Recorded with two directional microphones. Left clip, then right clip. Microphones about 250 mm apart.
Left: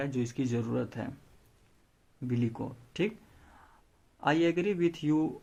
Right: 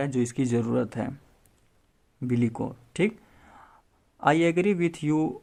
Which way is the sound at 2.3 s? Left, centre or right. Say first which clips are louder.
Right 6 dB; right.